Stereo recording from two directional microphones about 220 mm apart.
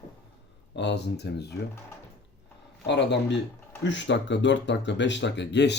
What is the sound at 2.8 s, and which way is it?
Speech, 50° left (ahead or behind).